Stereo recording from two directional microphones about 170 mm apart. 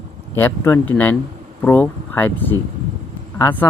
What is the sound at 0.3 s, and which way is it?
Speech, 15° left (ahead or behind).